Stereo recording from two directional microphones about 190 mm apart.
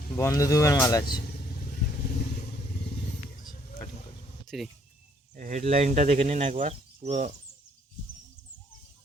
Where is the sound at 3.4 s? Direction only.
20° left (ahead or behind).